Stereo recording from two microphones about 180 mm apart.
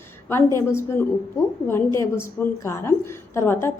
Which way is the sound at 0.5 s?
15° left (ahead or behind).